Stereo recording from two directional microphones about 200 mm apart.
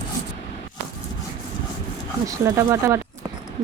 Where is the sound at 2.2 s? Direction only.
15° right (ahead or behind).